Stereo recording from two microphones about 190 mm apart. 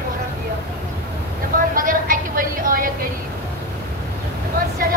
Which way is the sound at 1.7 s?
45° right (ahead or behind).